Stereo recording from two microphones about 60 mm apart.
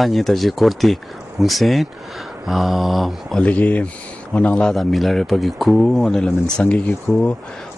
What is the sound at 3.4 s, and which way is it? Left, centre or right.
Speech, left.